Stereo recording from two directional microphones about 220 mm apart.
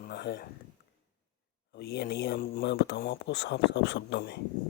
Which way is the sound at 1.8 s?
50° left (ahead or behind).